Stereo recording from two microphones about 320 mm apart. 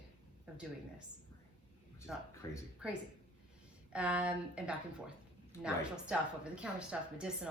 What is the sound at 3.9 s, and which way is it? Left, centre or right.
A woman's voice, centre.